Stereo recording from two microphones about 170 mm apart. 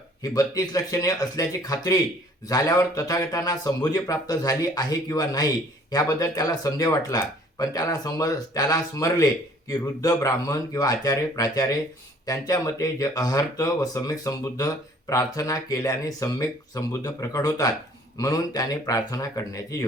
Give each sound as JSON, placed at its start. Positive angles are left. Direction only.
{"t": 0.2, "sound": "speech", "side_deg": 20}